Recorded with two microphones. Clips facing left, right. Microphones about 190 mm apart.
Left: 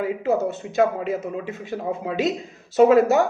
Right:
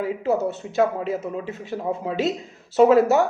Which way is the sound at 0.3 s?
15° left (ahead or behind).